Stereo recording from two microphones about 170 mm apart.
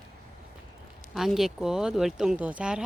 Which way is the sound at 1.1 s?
Centre (ahead or behind).